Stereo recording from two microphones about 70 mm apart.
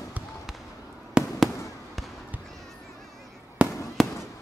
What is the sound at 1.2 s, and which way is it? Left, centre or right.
Fireworks, centre.